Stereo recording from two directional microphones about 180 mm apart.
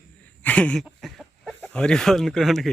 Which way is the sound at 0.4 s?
5° left (ahead or behind).